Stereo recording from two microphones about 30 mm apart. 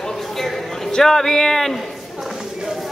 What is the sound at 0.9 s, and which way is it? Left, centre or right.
Speech, centre.